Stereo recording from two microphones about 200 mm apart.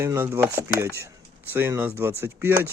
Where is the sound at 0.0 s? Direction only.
10° right (ahead or behind).